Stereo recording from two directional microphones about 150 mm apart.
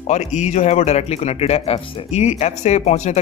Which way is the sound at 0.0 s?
50° left (ahead or behind).